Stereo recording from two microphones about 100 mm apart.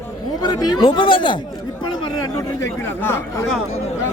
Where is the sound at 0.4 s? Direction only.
45° left (ahead or behind).